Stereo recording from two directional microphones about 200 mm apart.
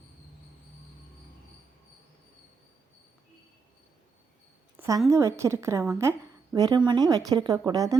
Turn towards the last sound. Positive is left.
turn(degrees=-15)  # may be behind; listen again after turning